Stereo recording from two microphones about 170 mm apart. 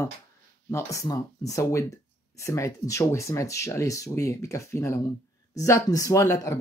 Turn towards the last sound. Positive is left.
turn(degrees=20)  # may be behind; listen again after turning